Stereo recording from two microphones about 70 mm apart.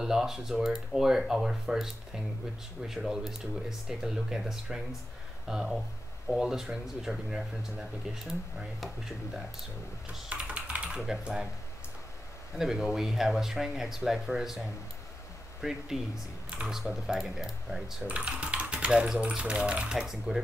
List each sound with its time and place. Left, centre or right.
0.0 s speech: centre
10.3 s typing: centre
11.0 s speech: centre
12.5 s speech: centre
15.6 s speech: centre
18.0 s typing: centre
18.9 s speech: centre